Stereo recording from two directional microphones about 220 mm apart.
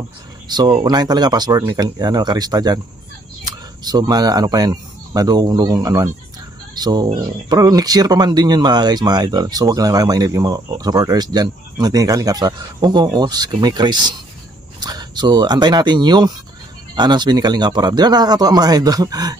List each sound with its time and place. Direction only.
0.5 s speech: 20° right (ahead or behind)